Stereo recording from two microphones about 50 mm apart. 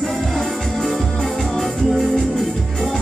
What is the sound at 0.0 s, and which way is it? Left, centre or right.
Music, centre.